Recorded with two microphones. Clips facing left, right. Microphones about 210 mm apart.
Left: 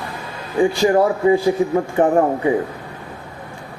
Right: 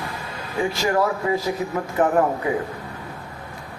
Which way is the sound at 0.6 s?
30° left (ahead or behind).